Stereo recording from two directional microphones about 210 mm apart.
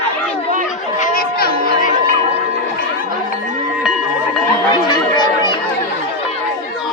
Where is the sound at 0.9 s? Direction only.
40° left (ahead or behind).